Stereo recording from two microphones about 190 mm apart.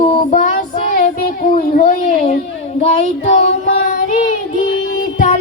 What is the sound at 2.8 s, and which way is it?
Child singing, 35° left (ahead or behind).